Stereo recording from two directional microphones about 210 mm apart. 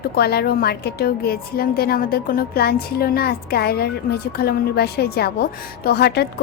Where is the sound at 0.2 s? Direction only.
50° left (ahead or behind).